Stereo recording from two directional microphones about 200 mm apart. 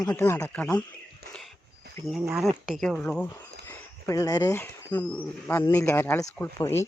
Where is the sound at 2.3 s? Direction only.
Centre (ahead or behind).